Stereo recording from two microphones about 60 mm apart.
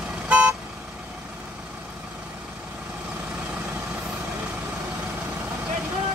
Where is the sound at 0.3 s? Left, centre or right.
Right.